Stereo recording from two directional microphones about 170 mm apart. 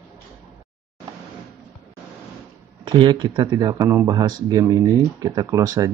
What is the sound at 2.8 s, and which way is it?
Speech, 25° right (ahead or behind).